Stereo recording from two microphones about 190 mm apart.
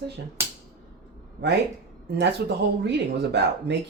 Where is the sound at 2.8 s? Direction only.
65° right (ahead or behind).